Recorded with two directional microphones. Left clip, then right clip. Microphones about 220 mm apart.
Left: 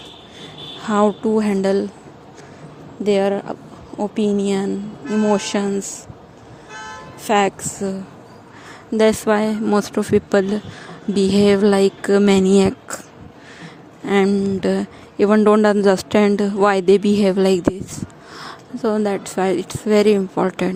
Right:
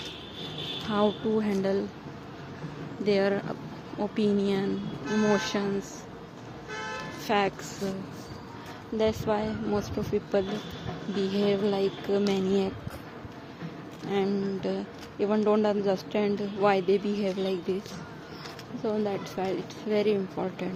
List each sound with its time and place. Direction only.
0.9 s a man's voice: 45° left (ahead or behind)
3.0 s speech: 40° left (ahead or behind)
5.0 s speech: 30° left (ahead or behind)
6.8 s music: 40° left (ahead or behind)
9.0 s a woman's voice: 55° left (ahead or behind)
14.1 s a man's voice: 50° left (ahead or behind)
18.8 s a man's voice: 50° left (ahead or behind)